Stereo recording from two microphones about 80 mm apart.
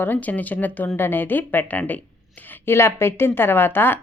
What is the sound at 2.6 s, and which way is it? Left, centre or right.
Speech, left.